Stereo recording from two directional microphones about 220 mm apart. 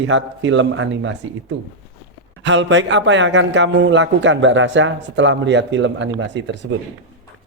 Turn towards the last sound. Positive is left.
turn(degrees=-55)  # may be behind; listen again after turning